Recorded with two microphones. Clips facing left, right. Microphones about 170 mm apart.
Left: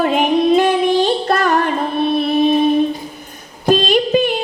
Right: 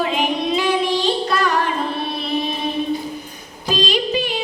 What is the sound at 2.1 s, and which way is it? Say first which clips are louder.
Music: left 10 dB; 50° left (ahead or behind).